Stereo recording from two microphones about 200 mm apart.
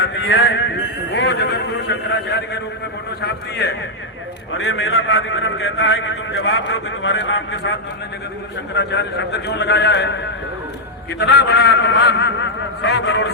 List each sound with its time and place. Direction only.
0.0 s a sound: 75° left (ahead or behind)
0.4 s speech: 60° left (ahead or behind)
4.5 s a man's voice: 80° left; by 10.2 s 60° left (ahead or behind)
11.2 s speech: 55° left (ahead or behind)